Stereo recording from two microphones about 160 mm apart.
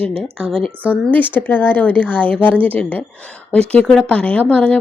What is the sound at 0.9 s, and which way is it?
A woman's voice, 10° left (ahead or behind).